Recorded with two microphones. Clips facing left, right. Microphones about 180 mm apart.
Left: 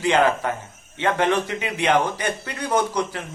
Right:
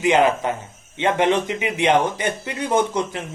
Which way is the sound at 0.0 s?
15° right (ahead or behind).